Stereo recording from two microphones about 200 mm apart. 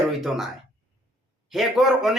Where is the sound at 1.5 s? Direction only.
Centre (ahead or behind).